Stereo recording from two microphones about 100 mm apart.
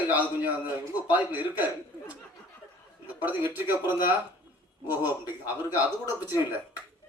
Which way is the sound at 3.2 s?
20° right (ahead or behind).